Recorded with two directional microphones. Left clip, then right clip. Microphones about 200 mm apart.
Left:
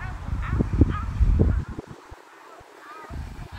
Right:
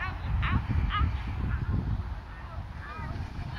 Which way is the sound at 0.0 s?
55° left (ahead or behind).